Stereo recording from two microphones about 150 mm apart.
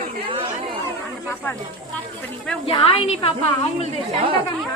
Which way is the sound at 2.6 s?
40° left (ahead or behind).